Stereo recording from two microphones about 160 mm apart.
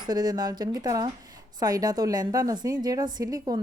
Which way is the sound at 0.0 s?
25° right (ahead or behind).